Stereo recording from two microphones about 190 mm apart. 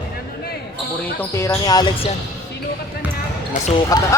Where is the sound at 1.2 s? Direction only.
15° left (ahead or behind).